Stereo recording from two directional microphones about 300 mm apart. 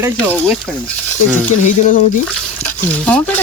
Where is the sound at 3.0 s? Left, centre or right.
Centre.